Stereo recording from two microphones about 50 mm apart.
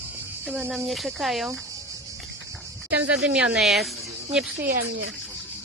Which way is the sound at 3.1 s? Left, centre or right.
Right.